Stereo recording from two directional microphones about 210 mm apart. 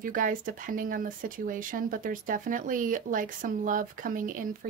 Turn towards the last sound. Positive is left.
turn(degrees=-40)  # may be behind; listen again after turning